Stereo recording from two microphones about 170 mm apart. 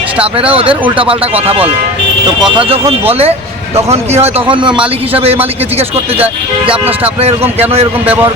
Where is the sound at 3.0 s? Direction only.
35° right (ahead or behind).